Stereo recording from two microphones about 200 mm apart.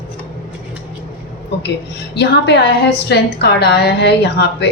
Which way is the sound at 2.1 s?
55° left (ahead or behind).